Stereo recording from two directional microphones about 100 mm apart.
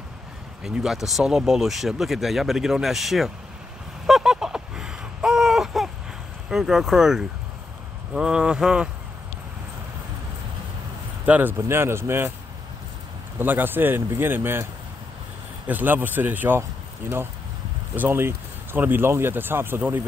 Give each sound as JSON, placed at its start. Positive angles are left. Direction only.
{"t": 0.7, "sound": "speech", "side_deg": -5}
{"t": 4.0, "sound": "a sound", "side_deg": -5}
{"t": 6.5, "sound": "speech", "side_deg": -5}
{"t": 11.2, "sound": "speech", "side_deg": -15}
{"t": 13.4, "sound": "speech", "side_deg": -20}
{"t": 17.9, "sound": "speech", "side_deg": -20}